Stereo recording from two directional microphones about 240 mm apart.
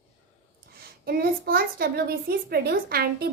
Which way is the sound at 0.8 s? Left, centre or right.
Right.